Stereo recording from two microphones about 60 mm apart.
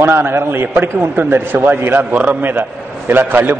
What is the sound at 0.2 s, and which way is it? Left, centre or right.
A man's voice, right.